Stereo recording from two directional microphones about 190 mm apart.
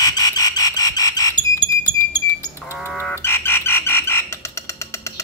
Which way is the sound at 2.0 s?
15° left (ahead or behind).